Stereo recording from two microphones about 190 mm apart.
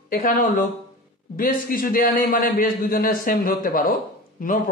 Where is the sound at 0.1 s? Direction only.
50° left (ahead or behind).